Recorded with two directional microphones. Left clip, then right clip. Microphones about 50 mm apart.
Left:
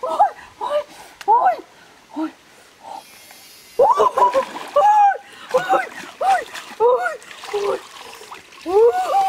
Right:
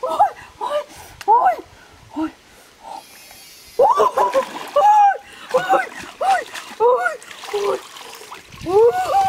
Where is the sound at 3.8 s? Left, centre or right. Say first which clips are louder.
Even; centre.